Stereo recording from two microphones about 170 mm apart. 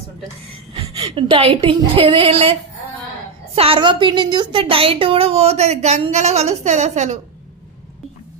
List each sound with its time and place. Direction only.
0.7 s a woman's voice: 35° right (ahead or behind)